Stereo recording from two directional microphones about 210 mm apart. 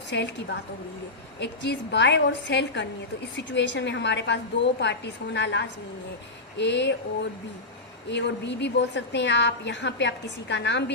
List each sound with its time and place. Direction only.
0.1 s a woman's voice: 55° left (ahead or behind)